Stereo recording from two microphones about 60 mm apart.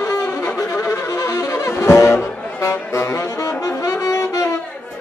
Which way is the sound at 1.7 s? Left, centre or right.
Left.